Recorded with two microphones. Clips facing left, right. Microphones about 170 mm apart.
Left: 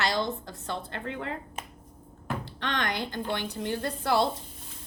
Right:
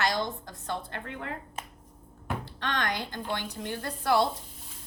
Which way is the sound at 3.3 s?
25° left (ahead or behind).